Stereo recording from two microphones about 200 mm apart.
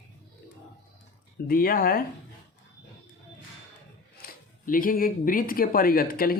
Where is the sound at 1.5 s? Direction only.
45° left (ahead or behind).